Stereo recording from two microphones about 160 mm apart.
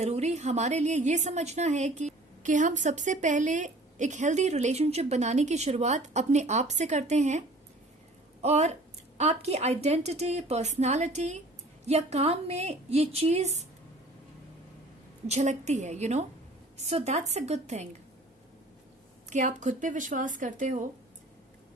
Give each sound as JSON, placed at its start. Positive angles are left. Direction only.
{"t": 0.0, "sound": "a woman's voice", "side_deg": -45}
{"t": 15.3, "sound": "a woman's voice", "side_deg": -45}
{"t": 19.3, "sound": "a woman's voice", "side_deg": -50}